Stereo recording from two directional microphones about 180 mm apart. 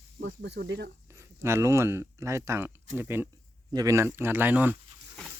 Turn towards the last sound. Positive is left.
turn(degrees=-10)  # may be behind; listen again after turning